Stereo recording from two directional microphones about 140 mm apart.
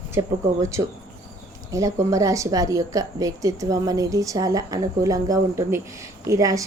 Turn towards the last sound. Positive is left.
turn(degrees=-25)  # may be behind; listen again after turning